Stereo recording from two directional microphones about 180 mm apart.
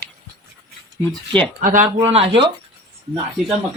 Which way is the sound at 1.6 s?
45° right (ahead or behind).